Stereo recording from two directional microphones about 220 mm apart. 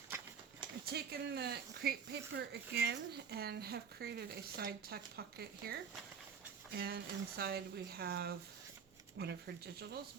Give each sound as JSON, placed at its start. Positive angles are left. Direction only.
{"t": 0.9, "sound": "speech", "side_deg": -45}